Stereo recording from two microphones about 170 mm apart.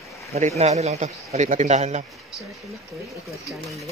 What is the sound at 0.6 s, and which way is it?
Speech, 40° right (ahead or behind).